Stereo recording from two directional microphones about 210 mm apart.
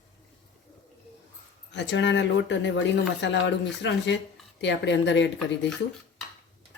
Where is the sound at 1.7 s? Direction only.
60° left (ahead or behind).